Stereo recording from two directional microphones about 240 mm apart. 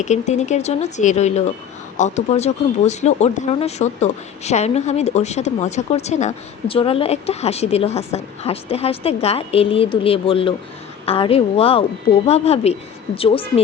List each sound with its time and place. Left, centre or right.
0.0 s speech: left